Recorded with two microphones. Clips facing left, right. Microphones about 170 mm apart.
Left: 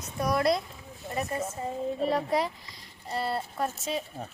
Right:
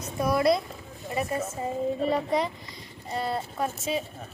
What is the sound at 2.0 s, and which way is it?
Speech, centre (ahead or behind).